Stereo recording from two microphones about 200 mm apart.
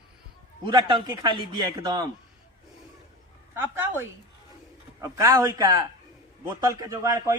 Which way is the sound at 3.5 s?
10° right (ahead or behind).